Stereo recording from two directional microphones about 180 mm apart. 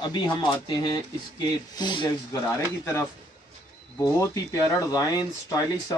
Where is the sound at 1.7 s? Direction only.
25° left (ahead or behind).